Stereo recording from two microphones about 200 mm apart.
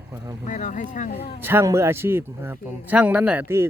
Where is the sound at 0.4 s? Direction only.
40° left (ahead or behind).